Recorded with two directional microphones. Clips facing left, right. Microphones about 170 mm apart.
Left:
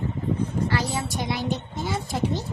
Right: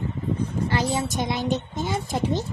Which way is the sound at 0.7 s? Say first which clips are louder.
Right 2 dB; 20° right (ahead or behind).